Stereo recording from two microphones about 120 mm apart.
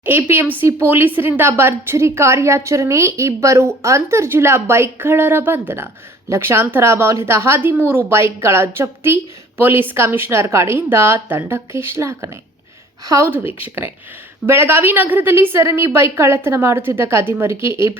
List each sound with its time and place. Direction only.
0.0 s a woman's voice: 15° right (ahead or behind)